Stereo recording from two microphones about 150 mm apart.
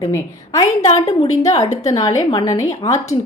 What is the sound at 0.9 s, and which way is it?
Speech, 45° left (ahead or behind).